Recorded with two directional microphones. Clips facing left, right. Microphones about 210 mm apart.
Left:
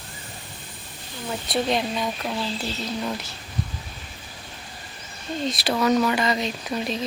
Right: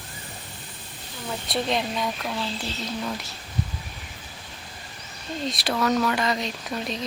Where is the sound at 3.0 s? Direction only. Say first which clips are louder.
Left 2 dB; centre (ahead or behind).